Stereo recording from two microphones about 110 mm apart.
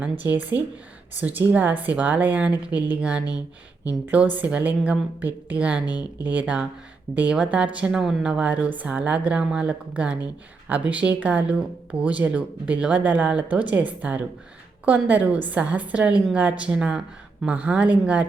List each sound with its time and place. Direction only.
0.0 s speech: 15° right (ahead or behind)